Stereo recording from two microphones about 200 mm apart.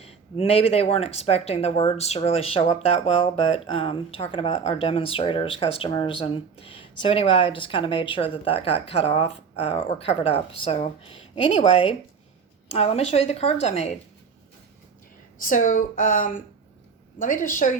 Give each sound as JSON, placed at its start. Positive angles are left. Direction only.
{"t": 0.0, "sound": "a woman's voice", "side_deg": 30}
{"t": 15.4, "sound": "a woman's voice", "side_deg": 40}